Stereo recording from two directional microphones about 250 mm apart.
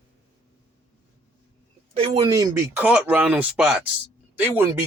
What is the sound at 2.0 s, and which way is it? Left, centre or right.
Speech, right.